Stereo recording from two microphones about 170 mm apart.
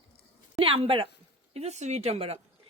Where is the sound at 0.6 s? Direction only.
30° right (ahead or behind).